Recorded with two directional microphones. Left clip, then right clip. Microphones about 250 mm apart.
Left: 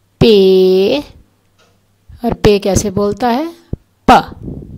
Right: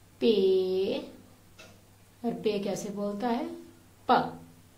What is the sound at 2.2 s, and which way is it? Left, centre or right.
A woman's voice, left.